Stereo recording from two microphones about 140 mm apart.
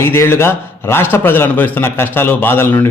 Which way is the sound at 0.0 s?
15° left (ahead or behind).